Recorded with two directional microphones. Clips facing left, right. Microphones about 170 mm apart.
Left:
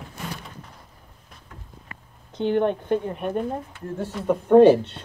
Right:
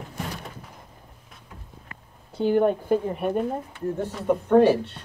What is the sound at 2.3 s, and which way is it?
Speech, 5° right (ahead or behind).